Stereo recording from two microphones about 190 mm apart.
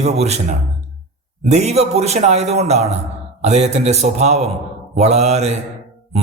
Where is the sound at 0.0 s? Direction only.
35° right (ahead or behind).